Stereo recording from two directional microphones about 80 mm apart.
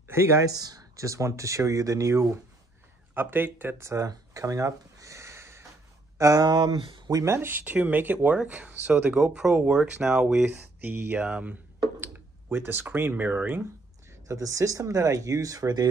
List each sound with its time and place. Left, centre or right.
0.1 s speech: right
0.5 s speech: right
3.2 s speech: right
6.4 s speech: right
7.2 s speech: right
14.2 s speech: right